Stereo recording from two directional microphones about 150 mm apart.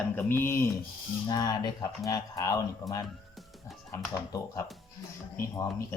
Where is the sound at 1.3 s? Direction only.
25° left (ahead or behind).